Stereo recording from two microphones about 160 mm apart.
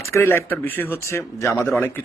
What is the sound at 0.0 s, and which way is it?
A man's voice, 15° left (ahead or behind).